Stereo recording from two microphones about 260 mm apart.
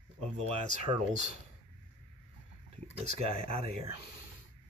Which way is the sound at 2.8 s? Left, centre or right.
Right.